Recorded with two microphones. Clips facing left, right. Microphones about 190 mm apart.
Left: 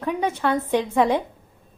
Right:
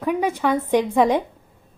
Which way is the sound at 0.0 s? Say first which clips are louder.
Right 2 dB; 10° right (ahead or behind).